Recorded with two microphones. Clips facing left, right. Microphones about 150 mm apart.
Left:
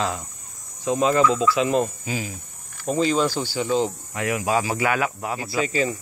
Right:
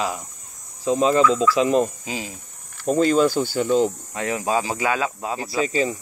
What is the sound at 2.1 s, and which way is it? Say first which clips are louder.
Speech: left 1 dB; 25° right (ahead or behind).